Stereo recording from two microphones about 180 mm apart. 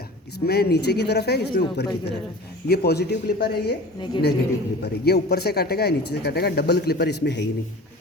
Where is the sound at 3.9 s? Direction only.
25° left (ahead or behind).